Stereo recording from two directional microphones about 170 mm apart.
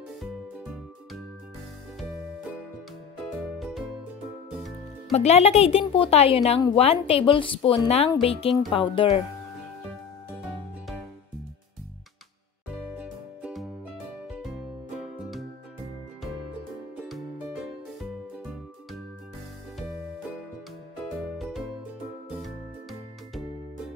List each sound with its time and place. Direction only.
3.5 s music: centre (ahead or behind)
5.1 s a woman's voice: 40° left (ahead or behind)
12.9 s music: 5° right (ahead or behind)
16.9 s music: 5° right (ahead or behind)
21.2 s music: centre (ahead or behind)